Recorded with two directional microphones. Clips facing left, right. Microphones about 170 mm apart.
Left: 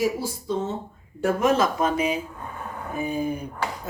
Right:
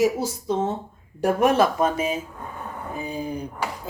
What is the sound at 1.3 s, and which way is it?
Speech, 65° right (ahead or behind).